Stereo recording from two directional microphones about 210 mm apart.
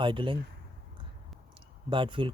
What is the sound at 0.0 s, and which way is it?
Speech, 25° right (ahead or behind).